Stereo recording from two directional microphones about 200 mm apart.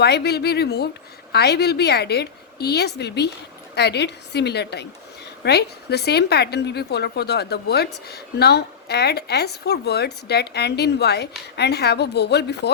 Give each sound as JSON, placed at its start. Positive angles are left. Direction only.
{"t": 0.0, "sound": "a woman's voice", "side_deg": 55}